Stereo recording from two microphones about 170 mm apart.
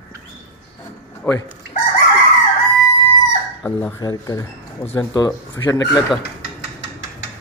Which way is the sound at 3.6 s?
10° left (ahead or behind).